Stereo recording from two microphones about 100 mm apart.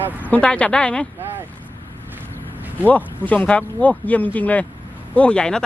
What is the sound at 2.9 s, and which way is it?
Speech, 15° left (ahead or behind).